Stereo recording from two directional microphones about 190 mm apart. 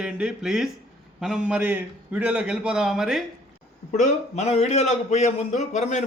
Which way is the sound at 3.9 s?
40° left (ahead or behind).